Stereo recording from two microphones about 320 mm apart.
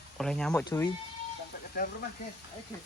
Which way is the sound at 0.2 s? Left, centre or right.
Centre.